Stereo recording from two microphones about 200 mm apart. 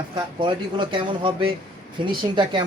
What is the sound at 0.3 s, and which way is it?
Speech, 25° right (ahead or behind).